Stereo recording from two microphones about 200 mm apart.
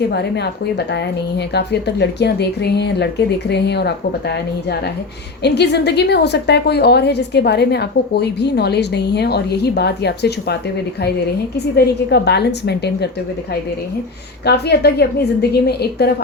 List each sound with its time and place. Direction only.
0.1 s a woman's voice: 55° left (ahead or behind)
12.1 s a woman's voice: 55° left (ahead or behind)
14.4 s a woman's voice: 55° left (ahead or behind)